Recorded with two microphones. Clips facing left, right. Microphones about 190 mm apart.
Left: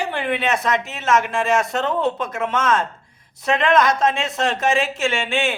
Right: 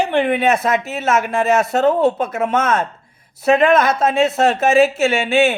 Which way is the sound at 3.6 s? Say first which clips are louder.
Left 1 dB; 5° right (ahead or behind).